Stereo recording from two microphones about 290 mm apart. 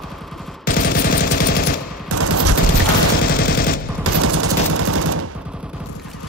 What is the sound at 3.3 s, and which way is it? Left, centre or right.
Machine gun, left.